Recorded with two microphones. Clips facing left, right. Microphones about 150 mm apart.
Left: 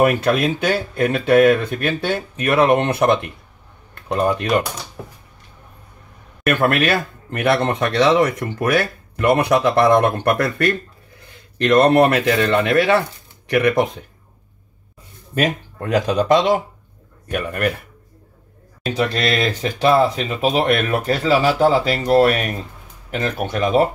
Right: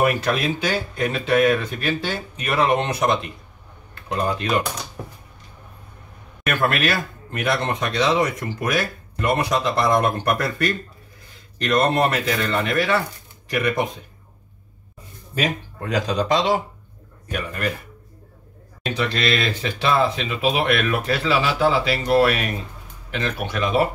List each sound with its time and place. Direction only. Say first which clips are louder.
0.0 s speech: left 4 dB; 55° left (ahead or behind)
6.6 s speech: left 3 dB; 60° left (ahead or behind)
15.3 s speech: left 4 dB; 55° left (ahead or behind)
18.9 s speech: left 3 dB; 45° left (ahead or behind)